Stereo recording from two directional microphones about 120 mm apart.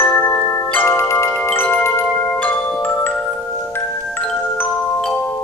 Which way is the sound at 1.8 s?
20° left (ahead or behind).